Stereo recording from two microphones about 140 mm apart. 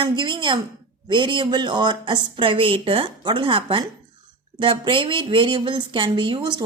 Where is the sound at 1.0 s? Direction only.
35° right (ahead or behind).